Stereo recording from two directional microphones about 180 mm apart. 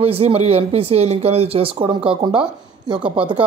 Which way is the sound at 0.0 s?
35° right (ahead or behind).